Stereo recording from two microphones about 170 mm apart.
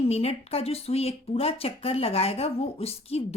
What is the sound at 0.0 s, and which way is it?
Speech, 35° left (ahead or behind).